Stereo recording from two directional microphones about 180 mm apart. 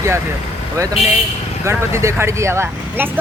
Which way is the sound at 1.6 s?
15° right (ahead or behind).